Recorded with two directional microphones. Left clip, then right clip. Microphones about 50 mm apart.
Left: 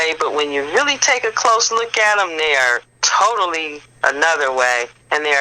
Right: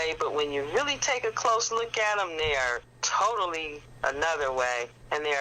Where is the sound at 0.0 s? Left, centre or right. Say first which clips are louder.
Left 10 dB; left.